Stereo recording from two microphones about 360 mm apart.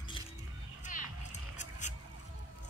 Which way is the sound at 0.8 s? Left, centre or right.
Left.